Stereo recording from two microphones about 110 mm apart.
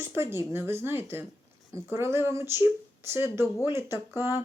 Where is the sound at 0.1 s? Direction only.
20° right (ahead or behind).